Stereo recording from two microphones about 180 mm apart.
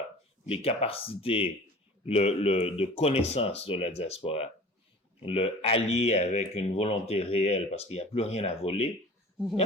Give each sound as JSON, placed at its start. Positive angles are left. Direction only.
{"t": 0.4, "sound": "speech", "side_deg": 30}